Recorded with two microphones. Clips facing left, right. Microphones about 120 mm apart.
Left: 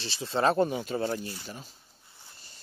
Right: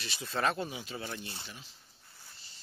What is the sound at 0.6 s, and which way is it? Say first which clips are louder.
Speech: left 12 dB; 50° left (ahead or behind).